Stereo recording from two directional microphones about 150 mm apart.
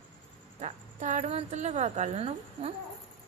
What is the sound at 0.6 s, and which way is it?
A woman's voice, 55° right (ahead or behind).